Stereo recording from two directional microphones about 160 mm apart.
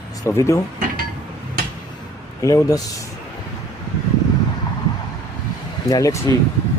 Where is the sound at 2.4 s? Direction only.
20° left (ahead or behind).